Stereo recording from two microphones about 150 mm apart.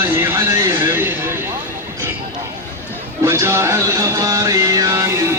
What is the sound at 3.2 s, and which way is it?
Music, 15° right (ahead or behind).